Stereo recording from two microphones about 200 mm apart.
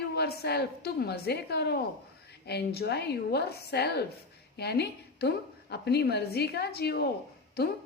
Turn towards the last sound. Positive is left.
turn(degrees=55)  # may be behind; listen again after turning